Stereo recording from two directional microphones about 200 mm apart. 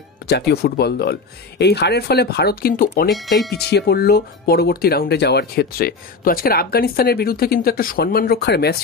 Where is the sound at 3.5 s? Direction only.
55° left (ahead or behind).